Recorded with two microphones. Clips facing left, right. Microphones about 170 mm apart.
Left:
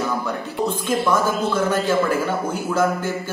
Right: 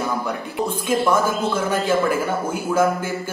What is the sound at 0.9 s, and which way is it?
A man's voice, 10° right (ahead or behind).